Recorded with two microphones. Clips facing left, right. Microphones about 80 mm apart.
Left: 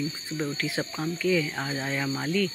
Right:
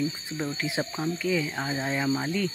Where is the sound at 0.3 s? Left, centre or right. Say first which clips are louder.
Left 1 dB; centre.